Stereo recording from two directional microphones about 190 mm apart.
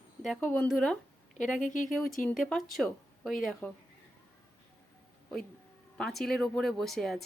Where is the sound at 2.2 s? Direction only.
5° left (ahead or behind).